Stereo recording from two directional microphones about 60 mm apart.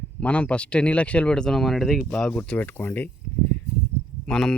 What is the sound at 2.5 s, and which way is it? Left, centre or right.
Speech, left.